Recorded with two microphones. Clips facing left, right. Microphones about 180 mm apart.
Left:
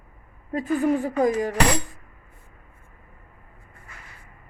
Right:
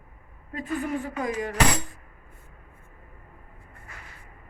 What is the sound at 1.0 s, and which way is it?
Speech, 40° left (ahead or behind).